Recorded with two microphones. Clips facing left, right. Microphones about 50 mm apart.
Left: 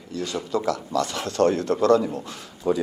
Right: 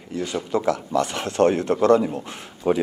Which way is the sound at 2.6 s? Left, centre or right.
Right.